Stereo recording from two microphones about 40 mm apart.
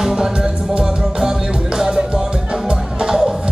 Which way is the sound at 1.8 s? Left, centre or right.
Centre.